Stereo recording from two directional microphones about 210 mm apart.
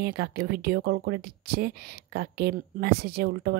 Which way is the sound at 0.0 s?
50° right (ahead or behind).